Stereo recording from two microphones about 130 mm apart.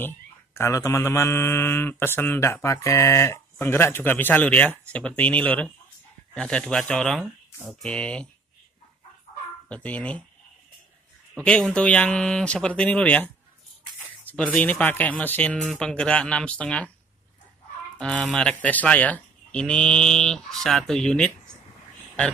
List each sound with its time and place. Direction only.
0.6 s speech: 25° left (ahead or behind); by 8.3 s 10° left (ahead or behind)
9.7 s speech: 10° left (ahead or behind)
11.3 s speech: 5° left (ahead or behind)
17.9 s speech: 10° left (ahead or behind)